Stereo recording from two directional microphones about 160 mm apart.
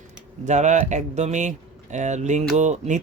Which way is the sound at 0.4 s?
45° right (ahead or behind).